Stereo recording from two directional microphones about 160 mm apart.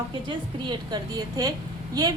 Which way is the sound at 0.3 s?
30° right (ahead or behind).